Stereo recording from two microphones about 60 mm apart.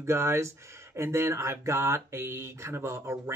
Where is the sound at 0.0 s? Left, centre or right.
Right.